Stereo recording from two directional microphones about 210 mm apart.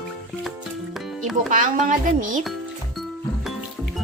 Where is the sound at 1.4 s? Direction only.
40° right (ahead or behind).